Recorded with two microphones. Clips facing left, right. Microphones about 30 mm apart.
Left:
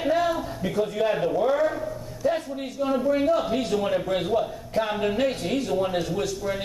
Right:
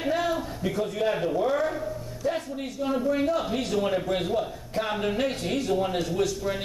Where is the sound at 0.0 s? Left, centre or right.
Centre.